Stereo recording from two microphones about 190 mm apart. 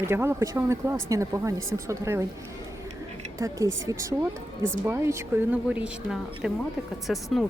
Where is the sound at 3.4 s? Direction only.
15° right (ahead or behind); by 7.5 s centre (ahead or behind).